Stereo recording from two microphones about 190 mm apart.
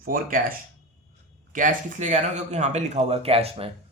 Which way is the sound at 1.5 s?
40° right (ahead or behind).